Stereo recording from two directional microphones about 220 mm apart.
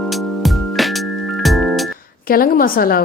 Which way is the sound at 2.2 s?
40° left (ahead or behind).